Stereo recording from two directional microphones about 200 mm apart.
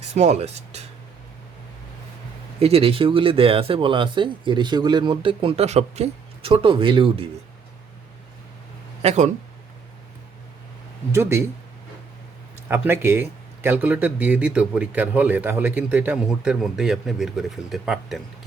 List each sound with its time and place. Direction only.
0.1 s speech: 35° right (ahead or behind)
2.6 s speech: 30° right (ahead or behind)
9.0 s speech: 35° right (ahead or behind)
11.1 s speech: 10° right (ahead or behind)
12.6 s speech: 10° right (ahead or behind)